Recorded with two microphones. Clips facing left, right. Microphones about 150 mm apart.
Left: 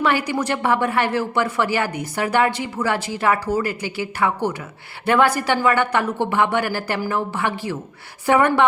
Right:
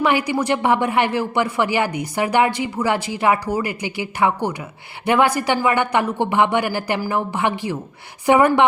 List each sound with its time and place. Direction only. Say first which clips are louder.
0.0 s speech: right 2 dB; 15° right (ahead or behind)